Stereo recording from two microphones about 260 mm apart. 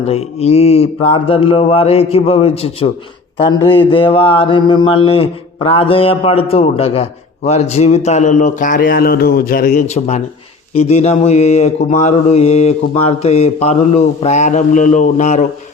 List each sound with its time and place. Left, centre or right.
0.1 s mantra: left